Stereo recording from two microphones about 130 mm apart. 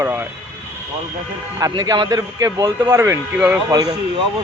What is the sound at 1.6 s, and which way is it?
Speech, 30° right (ahead or behind).